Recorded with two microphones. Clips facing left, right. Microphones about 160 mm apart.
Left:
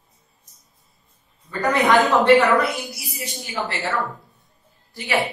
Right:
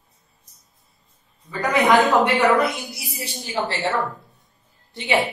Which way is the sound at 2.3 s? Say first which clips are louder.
Left 1 dB; 20° right (ahead or behind).